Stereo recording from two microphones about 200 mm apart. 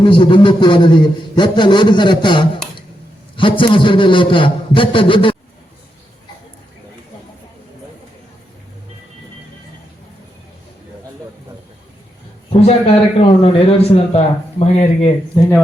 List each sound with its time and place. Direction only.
0.0 s a man's voice: 25° left (ahead or behind)
12.6 s a man's voice: 25° left (ahead or behind)